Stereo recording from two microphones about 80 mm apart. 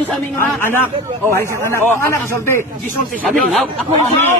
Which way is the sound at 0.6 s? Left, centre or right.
Left.